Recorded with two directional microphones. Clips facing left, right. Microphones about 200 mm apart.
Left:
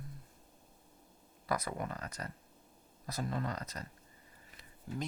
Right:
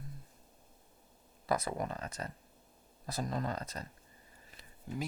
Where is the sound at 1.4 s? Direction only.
25° right (ahead or behind).